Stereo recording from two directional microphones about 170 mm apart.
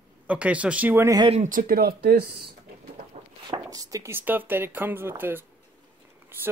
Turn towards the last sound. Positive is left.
turn(degrees=-10)  # may be behind; listen again after turning